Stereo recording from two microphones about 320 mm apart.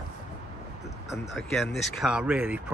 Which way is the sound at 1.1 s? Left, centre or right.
Centre.